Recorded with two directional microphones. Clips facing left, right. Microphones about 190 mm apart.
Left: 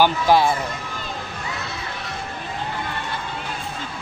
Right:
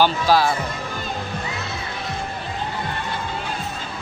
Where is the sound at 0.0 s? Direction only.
20° left (ahead or behind).